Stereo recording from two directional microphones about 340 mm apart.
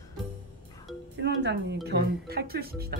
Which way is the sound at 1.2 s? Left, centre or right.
Right.